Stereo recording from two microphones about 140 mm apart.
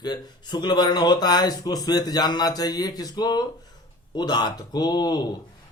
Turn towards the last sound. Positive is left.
turn(degrees=30)  # may be behind; listen again after turning